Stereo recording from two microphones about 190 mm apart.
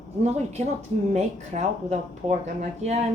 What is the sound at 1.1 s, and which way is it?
Speech, 35° right (ahead or behind).